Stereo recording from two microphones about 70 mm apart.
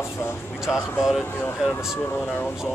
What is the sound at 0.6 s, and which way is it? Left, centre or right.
Speech, centre.